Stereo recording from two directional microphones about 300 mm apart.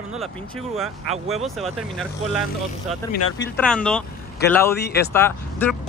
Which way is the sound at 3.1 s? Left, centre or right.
Left.